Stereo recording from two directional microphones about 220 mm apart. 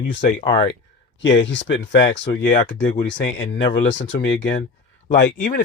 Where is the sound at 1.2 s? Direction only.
55° left (ahead or behind); by 2.9 s 40° left (ahead or behind).